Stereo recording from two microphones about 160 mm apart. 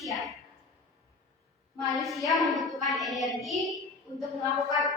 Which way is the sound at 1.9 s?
Centre (ahead or behind).